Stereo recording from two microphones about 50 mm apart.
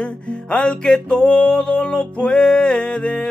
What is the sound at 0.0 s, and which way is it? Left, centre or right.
Music, left.